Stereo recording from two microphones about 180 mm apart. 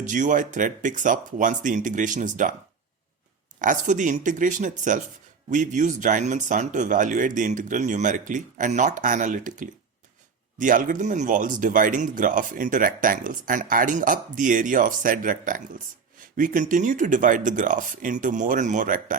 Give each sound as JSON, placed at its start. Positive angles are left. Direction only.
{"t": 0.1, "sound": "speech", "side_deg": -45}
{"t": 3.6, "sound": "speech", "side_deg": -45}